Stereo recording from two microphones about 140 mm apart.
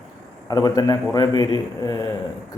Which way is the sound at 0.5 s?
25° left (ahead or behind).